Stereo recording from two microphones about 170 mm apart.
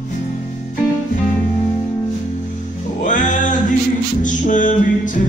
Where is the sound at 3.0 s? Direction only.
50° left (ahead or behind).